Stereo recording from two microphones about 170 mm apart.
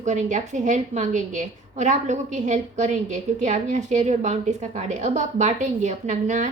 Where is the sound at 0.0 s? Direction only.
45° right (ahead or behind).